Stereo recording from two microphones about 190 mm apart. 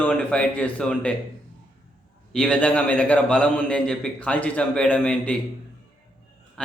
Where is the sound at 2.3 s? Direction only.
5° left (ahead or behind).